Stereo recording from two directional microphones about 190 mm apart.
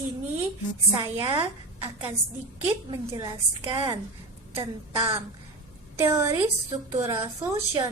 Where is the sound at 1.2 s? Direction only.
25° right (ahead or behind).